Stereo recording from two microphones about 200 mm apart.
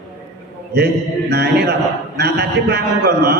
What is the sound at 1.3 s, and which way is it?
A man's voice, 55° right (ahead or behind).